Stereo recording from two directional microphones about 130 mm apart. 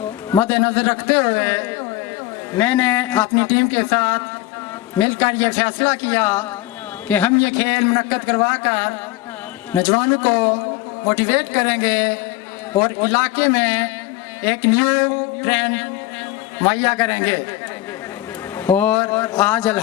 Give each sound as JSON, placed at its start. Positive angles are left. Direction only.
{"t": 0.3, "sound": "a man's voice", "side_deg": 20}
{"t": 7.3, "sound": "a man's voice", "side_deg": 25}
{"t": 18.5, "sound": "a man's voice", "side_deg": 15}